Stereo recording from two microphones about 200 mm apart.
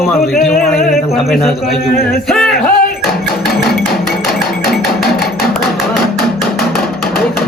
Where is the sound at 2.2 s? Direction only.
Centre (ahead or behind).